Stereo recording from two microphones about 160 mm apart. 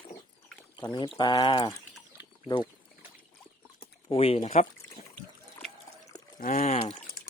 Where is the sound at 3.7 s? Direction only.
35° left (ahead or behind).